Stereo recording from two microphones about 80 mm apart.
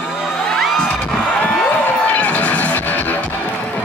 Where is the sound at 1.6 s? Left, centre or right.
Centre.